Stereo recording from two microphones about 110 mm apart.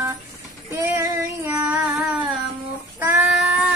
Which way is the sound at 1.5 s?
10° right (ahead or behind).